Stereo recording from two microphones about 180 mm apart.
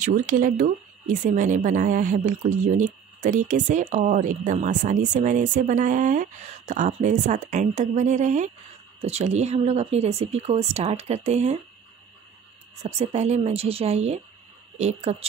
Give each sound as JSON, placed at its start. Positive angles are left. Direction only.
{"t": 0.0, "sound": "speech", "side_deg": -45}
{"t": 12.8, "sound": "speech", "side_deg": -35}